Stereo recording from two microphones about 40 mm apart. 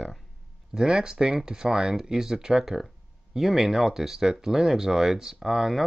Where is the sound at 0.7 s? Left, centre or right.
Centre.